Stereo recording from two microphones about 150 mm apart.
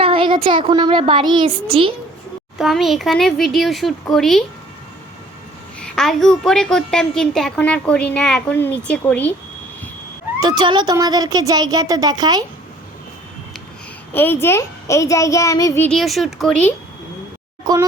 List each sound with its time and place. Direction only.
0.0 s a woman's voice: 35° right (ahead or behind)
2.6 s a woman's voice: centre (ahead or behind)
5.8 s a woman's voice: 5° left (ahead or behind)
10.4 s speech: 30° right (ahead or behind)
14.1 s a child's voice: 15° left (ahead or behind)
15.9 s a woman's voice: centre (ahead or behind)